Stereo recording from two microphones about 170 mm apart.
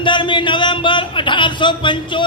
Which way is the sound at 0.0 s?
30° left (ahead or behind).